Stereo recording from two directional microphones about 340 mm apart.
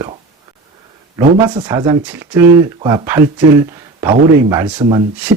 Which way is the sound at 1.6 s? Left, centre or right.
Centre.